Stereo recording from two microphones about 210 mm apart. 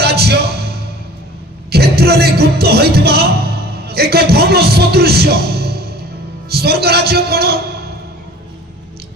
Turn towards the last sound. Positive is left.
turn(degrees=-50)  # may be behind; listen again after turning